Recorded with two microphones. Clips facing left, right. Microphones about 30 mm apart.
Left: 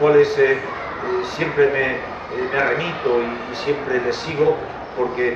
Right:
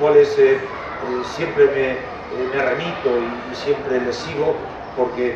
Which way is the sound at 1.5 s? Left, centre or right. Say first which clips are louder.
Right 2 dB; centre.